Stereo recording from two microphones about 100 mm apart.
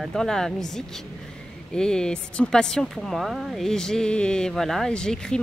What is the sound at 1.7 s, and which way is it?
Speech, 10° left (ahead or behind).